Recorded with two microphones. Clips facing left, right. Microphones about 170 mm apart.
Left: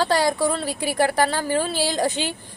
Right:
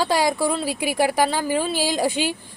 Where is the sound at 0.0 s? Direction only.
10° right (ahead or behind).